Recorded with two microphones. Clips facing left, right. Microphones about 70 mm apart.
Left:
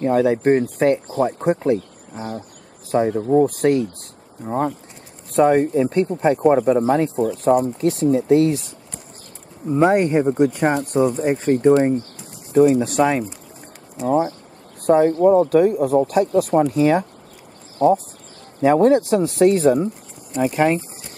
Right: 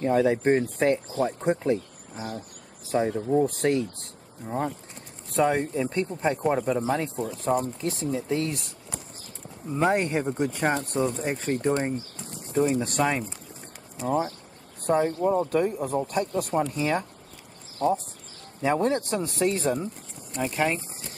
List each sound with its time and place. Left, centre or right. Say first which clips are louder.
0.0 s speech: left 5 dB; centre
5.4 s speech: left 9 dB; centre
6.5 s speech: left 9 dB; centre
6.8 s speech: left 9 dB; centre